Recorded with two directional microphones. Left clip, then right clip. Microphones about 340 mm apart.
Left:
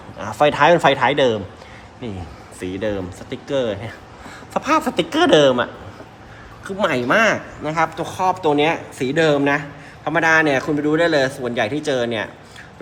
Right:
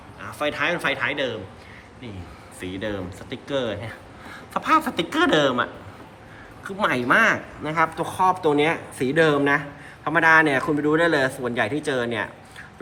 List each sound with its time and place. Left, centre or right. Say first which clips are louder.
0.2 s a man's voice: left 10 dB; centre
2.6 s speech: left 6 dB; centre
6.7 s speech: left 2 dB; centre